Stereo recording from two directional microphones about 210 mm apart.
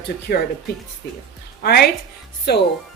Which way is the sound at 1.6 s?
50° left (ahead or behind).